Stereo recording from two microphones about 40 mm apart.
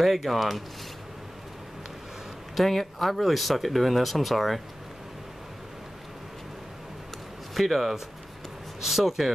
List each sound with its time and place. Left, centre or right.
0.0 s speech: centre
2.5 s speech: centre
7.5 s speech: centre